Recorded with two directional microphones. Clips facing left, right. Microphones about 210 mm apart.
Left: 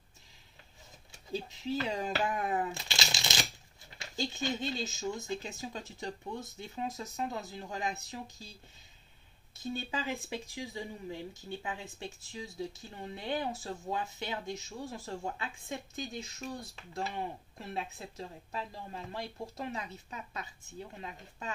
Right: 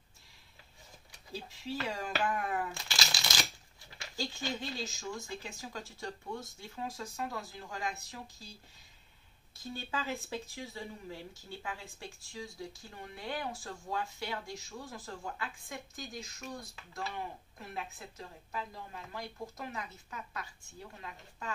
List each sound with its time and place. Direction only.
1.1 s speech: 20° left (ahead or behind)
9.6 s speech: 20° left (ahead or behind)